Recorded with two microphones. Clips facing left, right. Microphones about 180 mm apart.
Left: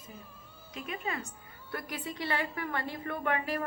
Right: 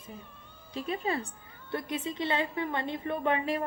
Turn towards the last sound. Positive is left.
turn(degrees=-25)  # may be behind; listen again after turning